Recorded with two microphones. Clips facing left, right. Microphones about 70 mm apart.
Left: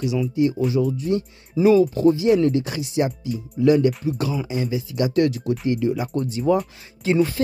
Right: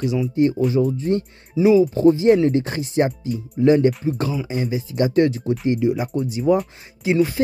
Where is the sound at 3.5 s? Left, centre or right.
Right; by 7.2 s centre.